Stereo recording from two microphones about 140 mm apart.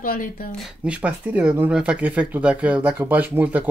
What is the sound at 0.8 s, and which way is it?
Speech, 10° right (ahead or behind).